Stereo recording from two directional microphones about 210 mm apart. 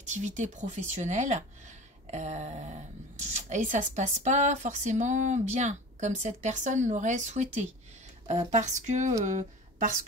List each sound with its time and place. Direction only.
0.0 s speech: 35° right (ahead or behind)